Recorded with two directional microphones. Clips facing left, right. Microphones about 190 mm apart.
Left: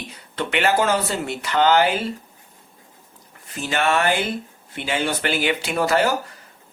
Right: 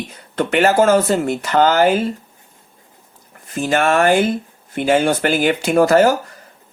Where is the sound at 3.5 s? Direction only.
45° right (ahead or behind).